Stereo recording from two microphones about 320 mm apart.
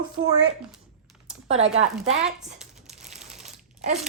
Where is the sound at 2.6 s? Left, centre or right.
Centre.